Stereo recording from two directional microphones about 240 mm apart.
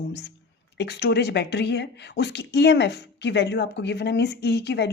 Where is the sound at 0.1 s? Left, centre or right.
Left.